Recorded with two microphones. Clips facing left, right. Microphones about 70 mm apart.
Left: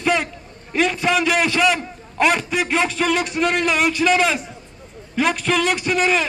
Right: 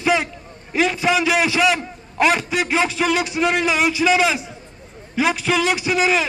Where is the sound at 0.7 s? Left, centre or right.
Centre.